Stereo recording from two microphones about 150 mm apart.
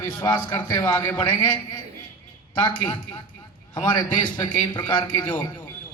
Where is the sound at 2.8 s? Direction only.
30° left (ahead or behind).